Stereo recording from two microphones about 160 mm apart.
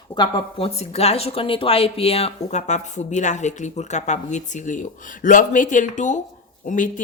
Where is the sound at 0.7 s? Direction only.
40° left (ahead or behind).